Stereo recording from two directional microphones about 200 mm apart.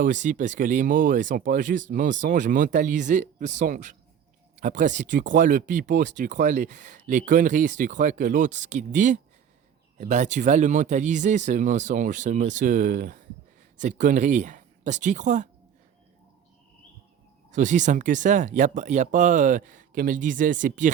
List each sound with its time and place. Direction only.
0.0 s speech: 40° right (ahead or behind)
17.5 s speech: 40° right (ahead or behind)